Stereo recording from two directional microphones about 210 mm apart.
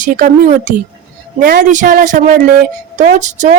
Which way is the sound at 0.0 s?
40° right (ahead or behind).